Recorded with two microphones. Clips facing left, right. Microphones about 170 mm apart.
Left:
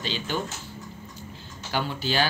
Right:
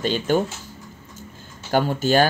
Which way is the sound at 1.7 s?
45° right (ahead or behind).